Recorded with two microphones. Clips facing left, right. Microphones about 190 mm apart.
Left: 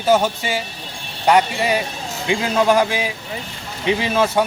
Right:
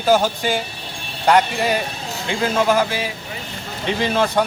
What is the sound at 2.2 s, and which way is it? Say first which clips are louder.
Speech: left 2 dB; 15° left (ahead or behind).